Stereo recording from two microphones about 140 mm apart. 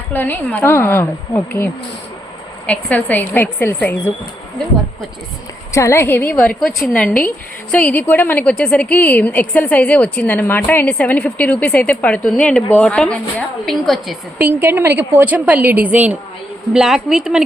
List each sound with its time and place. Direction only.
0.1 s a woman's voice: 15° left (ahead or behind)
5.7 s a woman's voice: 20° left (ahead or behind)
6.4 s a woman's voice: centre (ahead or behind)
14.3 s a woman's voice: 15° right (ahead or behind)